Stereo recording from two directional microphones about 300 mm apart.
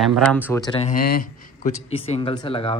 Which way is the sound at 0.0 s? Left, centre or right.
Centre.